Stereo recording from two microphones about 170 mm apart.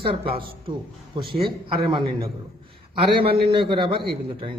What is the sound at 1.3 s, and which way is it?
A man's voice, 30° right (ahead or behind).